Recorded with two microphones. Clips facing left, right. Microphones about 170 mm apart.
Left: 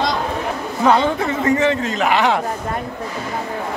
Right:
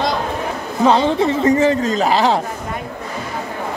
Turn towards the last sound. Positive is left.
turn(degrees=-35)  # may be behind; listen again after turning